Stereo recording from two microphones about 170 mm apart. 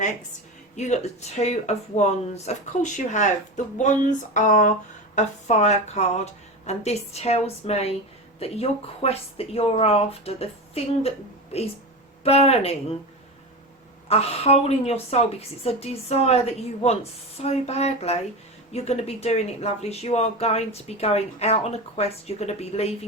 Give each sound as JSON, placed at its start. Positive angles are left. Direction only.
{"t": 0.8, "sound": "speech", "side_deg": 40}
{"t": 12.2, "sound": "speech", "side_deg": 35}
{"t": 14.1, "sound": "speech", "side_deg": 35}